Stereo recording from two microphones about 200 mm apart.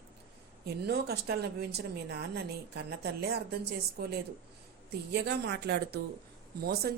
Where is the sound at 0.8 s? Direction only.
55° right (ahead or behind).